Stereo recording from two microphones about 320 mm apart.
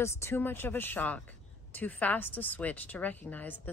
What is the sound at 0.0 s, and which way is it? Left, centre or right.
Speech, centre.